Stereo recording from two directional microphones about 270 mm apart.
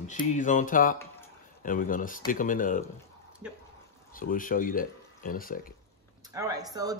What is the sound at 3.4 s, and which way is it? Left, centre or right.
Speech, centre.